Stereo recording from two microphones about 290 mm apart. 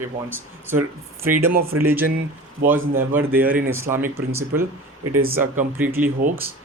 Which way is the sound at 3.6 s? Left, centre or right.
Right.